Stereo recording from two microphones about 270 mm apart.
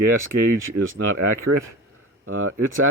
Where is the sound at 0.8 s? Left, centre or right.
Right.